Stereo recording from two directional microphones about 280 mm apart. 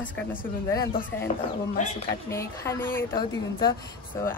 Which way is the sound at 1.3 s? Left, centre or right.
Left.